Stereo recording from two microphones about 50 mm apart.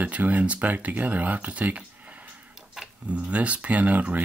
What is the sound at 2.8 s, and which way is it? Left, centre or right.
Tick-tock, centre.